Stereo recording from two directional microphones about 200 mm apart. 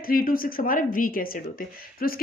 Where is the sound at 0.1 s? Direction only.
45° left (ahead or behind).